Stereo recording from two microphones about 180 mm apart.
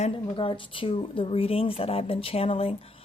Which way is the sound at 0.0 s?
30° left (ahead or behind).